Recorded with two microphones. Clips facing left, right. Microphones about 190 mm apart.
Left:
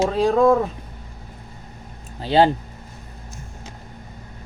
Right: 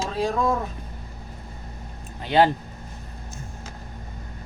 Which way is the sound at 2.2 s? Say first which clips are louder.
Left 2 dB; 30° left (ahead or behind).